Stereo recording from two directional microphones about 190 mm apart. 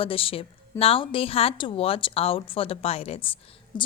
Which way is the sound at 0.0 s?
30° left (ahead or behind).